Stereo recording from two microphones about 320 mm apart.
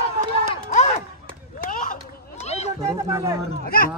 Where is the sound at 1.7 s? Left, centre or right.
Left.